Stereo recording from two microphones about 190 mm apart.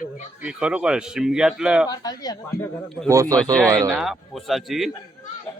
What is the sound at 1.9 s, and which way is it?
Speech, 20° left (ahead or behind).